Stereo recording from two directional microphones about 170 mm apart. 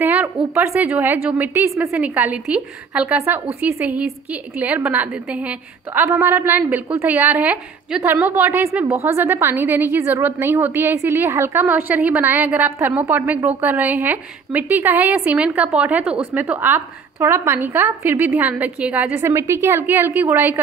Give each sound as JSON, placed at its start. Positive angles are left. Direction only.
{"t": 0.0, "sound": "a woman's voice", "side_deg": -10}